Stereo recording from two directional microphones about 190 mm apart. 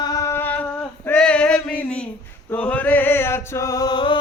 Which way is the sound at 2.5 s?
5° left (ahead or behind).